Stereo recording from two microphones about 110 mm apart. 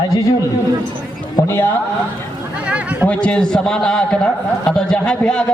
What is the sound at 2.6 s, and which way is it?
Speech, 15° right (ahead or behind).